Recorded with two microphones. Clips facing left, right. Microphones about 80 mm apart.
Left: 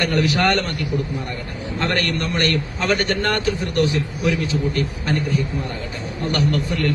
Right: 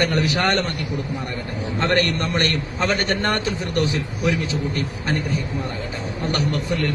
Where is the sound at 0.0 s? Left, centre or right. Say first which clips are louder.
Left 1 dB; right.